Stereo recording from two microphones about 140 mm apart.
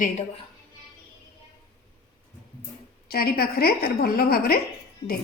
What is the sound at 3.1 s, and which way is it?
A woman's voice, 90° left.